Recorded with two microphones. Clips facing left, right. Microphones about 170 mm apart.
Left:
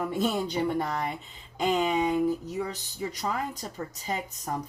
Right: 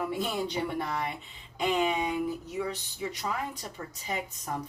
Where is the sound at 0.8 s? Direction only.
40° left (ahead or behind).